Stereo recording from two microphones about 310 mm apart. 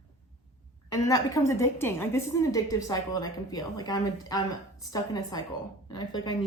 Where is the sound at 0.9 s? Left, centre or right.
Centre.